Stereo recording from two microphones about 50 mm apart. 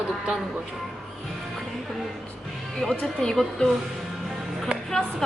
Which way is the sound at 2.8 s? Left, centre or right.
Centre.